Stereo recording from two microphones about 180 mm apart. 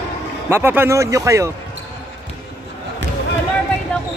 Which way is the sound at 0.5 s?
10° right (ahead or behind).